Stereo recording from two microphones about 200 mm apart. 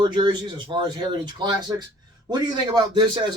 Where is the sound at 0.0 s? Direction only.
20° right (ahead or behind).